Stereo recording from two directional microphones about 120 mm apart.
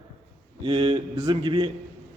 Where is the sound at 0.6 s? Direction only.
45° right (ahead or behind).